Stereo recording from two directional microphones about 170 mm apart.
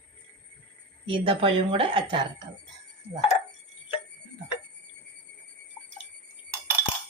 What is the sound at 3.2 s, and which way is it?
Speech, 40° left (ahead or behind).